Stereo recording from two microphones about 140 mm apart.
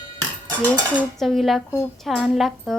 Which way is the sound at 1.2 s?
Centre (ahead or behind).